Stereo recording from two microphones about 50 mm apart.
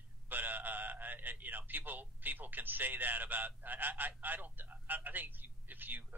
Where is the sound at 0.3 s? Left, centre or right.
Right.